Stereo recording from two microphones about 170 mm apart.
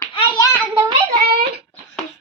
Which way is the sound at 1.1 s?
65° right (ahead or behind).